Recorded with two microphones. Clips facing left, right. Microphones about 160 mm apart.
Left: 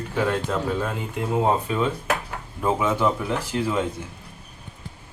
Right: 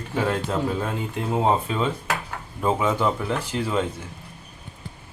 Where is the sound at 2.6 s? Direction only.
5° left (ahead or behind).